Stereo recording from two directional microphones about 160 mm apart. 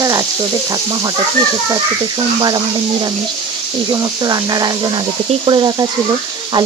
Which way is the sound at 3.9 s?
25° right (ahead or behind).